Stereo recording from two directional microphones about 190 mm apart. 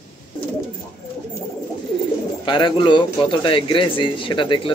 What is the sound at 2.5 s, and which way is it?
A man's voice, 25° left (ahead or behind).